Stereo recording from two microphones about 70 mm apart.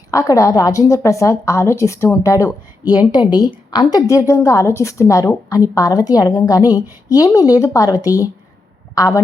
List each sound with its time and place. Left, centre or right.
0.1 s a woman's voice: left
2.8 s a woman's voice: left
4.0 s a woman's voice: left